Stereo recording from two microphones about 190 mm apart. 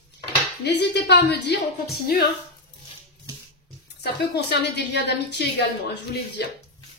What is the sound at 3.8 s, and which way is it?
A woman's voice, 60° left (ahead or behind).